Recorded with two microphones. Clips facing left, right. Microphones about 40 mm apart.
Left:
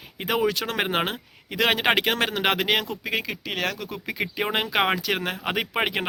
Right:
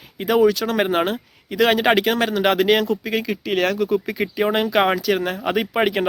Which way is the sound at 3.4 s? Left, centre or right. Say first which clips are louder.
Right 9 dB; centre.